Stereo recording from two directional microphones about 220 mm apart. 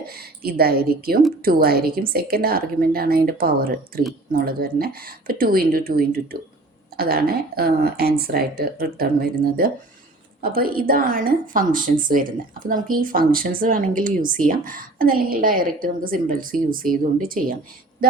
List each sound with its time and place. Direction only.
0.0 s a woman's voice: 45° right (ahead or behind)